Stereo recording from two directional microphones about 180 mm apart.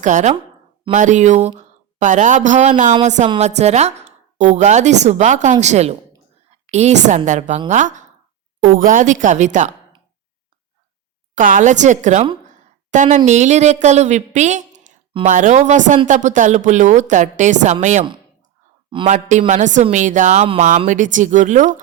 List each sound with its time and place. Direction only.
0.0 s a woman's voice: 40° right (ahead or behind)
11.3 s a woman's voice: 50° right (ahead or behind)
19.0 s a woman's voice: 45° right (ahead or behind)